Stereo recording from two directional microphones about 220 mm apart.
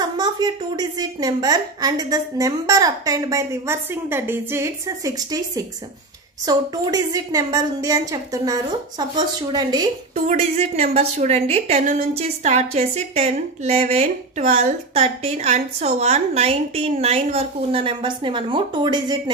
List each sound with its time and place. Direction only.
0.2 s a woman's voice: 20° right (ahead or behind)
6.4 s a woman's voice: 15° right (ahead or behind)
10.2 s a woman's voice: 30° right (ahead or behind)